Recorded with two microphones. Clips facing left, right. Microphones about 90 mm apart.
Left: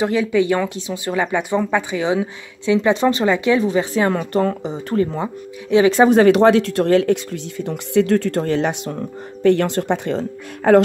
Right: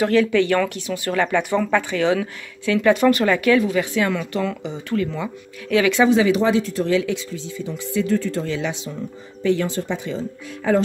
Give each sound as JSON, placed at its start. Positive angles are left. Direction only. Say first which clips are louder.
{"t": 0.0, "sound": "speech", "louder": "even", "side_deg": 15}
{"t": 5.9, "sound": "speech", "louder": "left 5 dB", "side_deg": 55}